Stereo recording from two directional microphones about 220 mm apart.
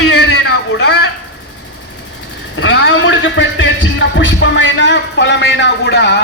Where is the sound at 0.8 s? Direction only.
50° left (ahead or behind).